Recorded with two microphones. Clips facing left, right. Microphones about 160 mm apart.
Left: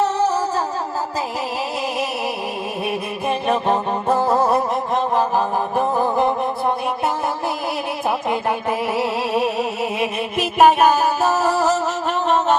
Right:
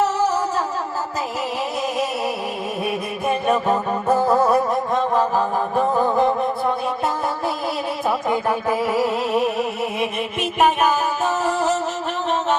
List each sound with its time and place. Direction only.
3.5 s music: 25° left (ahead or behind)
8.3 s music: 20° left (ahead or behind)
10.6 s music: 35° left (ahead or behind)